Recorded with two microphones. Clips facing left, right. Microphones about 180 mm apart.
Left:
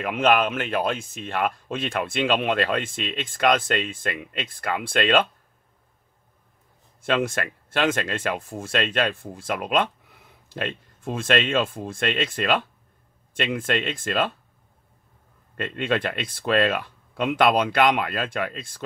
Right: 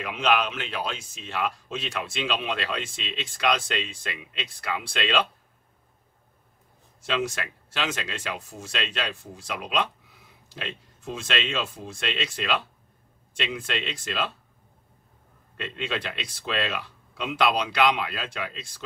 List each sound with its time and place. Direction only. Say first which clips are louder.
0.0 s speech: left 4 dB; 50° left (ahead or behind)
7.0 s speech: left 5 dB; 55° left (ahead or behind)
15.5 s speech: left 7 dB; 50° left (ahead or behind)